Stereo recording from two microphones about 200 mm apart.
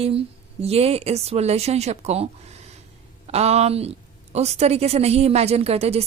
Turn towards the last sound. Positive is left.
turn(degrees=-30)  # may be behind; listen again after turning